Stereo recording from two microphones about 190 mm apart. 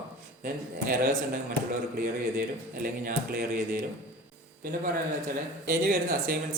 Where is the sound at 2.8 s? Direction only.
50° right (ahead or behind).